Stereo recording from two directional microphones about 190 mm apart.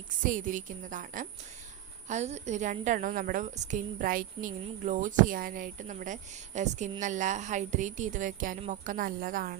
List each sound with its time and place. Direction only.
0.2 s a woman's voice: 45° right (ahead or behind)